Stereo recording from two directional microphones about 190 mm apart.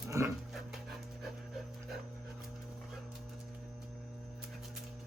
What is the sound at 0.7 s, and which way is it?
Dog, centre (ahead or behind).